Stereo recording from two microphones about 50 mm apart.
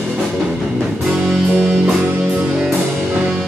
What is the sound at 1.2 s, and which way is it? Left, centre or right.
Music, centre.